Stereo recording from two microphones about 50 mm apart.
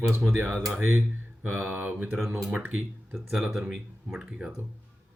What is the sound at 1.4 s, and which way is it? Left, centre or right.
Mantra, right.